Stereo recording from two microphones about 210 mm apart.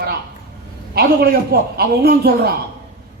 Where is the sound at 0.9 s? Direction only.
50° right (ahead or behind).